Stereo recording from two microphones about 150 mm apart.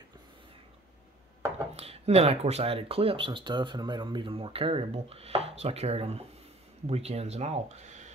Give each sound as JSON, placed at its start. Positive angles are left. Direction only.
{"t": 1.8, "sound": "speech", "side_deg": -45}